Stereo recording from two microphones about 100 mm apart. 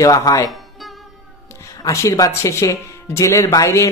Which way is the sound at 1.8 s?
35° left (ahead or behind).